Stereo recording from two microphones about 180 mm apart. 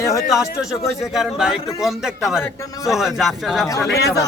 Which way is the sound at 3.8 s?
60° left (ahead or behind).